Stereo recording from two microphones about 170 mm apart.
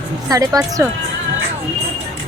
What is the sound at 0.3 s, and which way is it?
Speech, 20° right (ahead or behind).